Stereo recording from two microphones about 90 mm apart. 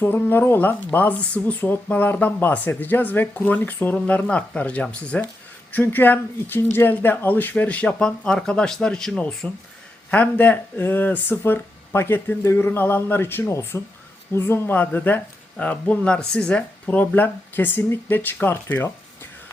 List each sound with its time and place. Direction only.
0.0 s speech: 25° left (ahead or behind)
5.7 s speech: 25° left (ahead or behind)